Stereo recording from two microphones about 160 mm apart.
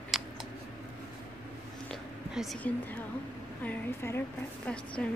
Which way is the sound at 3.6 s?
15° left (ahead or behind).